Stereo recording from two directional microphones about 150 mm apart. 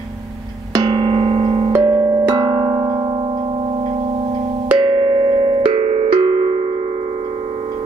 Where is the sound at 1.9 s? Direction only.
30° right (ahead or behind).